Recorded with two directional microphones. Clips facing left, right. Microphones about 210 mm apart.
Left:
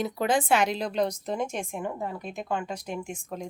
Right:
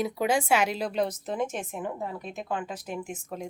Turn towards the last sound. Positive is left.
turn(degrees=-5)  # may be behind; listen again after turning